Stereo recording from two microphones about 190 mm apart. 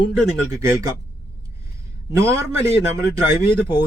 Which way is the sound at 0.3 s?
15° right (ahead or behind).